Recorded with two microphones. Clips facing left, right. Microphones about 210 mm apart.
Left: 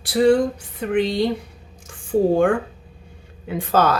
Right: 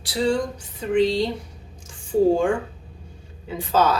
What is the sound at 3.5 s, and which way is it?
Speech, 55° left (ahead or behind).